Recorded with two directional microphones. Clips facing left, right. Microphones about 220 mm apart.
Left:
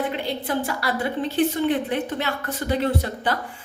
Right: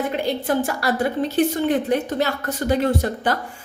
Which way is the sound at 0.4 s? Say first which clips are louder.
Right 4 dB; 45° right (ahead or behind).